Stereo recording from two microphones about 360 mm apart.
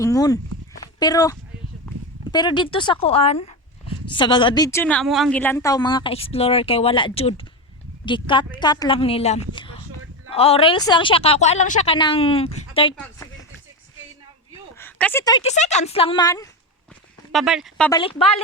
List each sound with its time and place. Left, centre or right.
0.0 s a woman's voice: centre
14.8 s a woman's voice: centre
17.3 s speech: centre
18.0 s a woman's voice: centre